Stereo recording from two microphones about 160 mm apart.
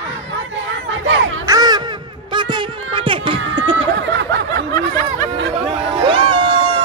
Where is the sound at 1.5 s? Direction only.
25° right (ahead or behind).